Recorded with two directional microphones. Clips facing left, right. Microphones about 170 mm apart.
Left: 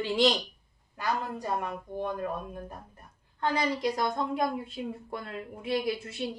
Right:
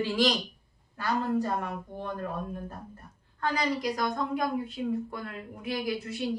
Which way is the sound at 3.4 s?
25° left (ahead or behind).